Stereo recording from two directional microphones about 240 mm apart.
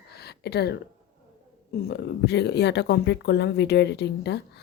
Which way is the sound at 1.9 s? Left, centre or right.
Left.